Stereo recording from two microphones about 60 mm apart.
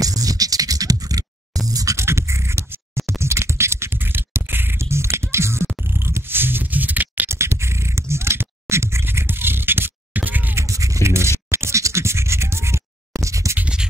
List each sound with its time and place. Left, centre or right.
0.0 s beatboxing: right
1.7 s music: right
2.0 s a sound: right
7.2 s scratch: right
10.7 s a sound: right
11.5 s scratch: right
13.2 s scratch: right